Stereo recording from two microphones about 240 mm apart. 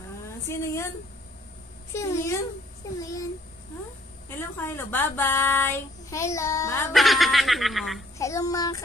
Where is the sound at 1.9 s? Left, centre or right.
Centre.